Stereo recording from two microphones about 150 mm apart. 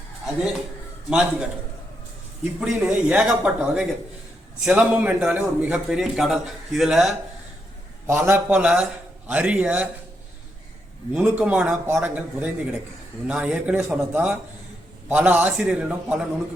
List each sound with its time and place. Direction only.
1.1 s a man's voice: 5° right (ahead or behind)
2.6 s a man's voice: 10° right (ahead or behind)
8.0 s a man's voice: 15° right (ahead or behind)
11.1 s a man's voice: 10° right (ahead or behind)